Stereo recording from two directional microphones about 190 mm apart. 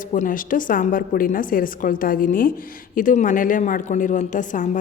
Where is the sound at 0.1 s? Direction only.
45° left (ahead or behind).